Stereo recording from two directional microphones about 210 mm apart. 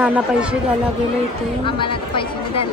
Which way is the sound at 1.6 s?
25° left (ahead or behind).